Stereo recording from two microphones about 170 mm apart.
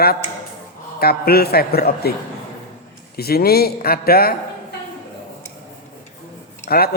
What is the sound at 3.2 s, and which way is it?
A man's voice, 65° left (ahead or behind).